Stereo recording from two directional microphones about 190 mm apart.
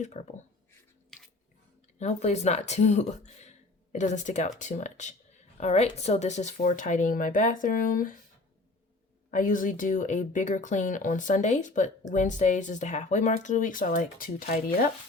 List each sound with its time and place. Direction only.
0.0 s speech: 35° left (ahead or behind)
2.0 s speech: 35° left (ahead or behind)
9.3 s speech: 45° left (ahead or behind)